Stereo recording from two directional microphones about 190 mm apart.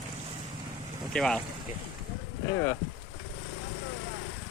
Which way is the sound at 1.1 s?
5° left (ahead or behind).